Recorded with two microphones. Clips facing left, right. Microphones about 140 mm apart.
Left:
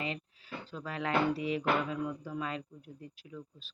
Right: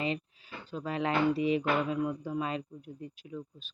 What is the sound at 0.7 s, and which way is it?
Speech, 20° right (ahead or behind).